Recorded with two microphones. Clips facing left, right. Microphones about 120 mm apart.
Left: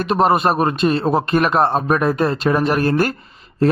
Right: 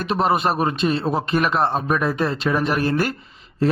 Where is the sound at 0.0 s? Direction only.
50° left (ahead or behind).